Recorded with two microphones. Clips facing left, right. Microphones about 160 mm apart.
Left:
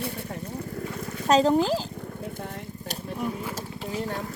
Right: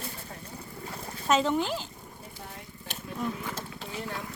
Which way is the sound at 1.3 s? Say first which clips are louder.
Left 6 dB; 35° left (ahead or behind).